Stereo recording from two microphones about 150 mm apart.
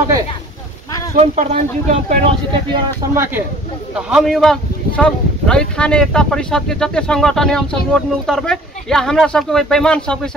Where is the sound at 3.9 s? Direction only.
5° right (ahead or behind).